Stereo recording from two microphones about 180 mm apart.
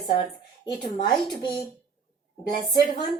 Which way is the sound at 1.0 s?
25° left (ahead or behind).